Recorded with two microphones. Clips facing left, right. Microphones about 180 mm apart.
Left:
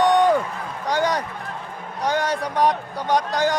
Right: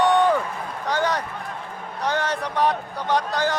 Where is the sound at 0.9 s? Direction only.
15° left (ahead or behind).